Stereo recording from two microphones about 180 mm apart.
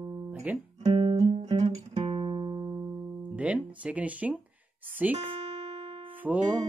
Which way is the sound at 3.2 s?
5° right (ahead or behind).